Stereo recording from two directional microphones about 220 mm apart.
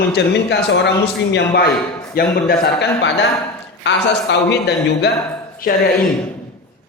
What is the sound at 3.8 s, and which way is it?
A man's voice, 55° left (ahead or behind).